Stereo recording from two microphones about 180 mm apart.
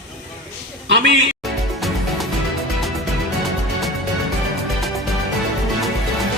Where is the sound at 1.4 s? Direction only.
Centre (ahead or behind).